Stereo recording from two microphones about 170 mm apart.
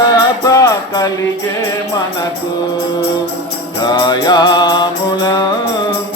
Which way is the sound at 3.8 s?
25° left (ahead or behind).